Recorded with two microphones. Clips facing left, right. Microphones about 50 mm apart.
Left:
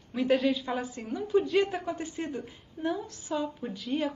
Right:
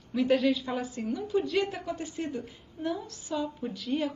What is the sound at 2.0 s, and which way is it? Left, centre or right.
A woman's voice, centre.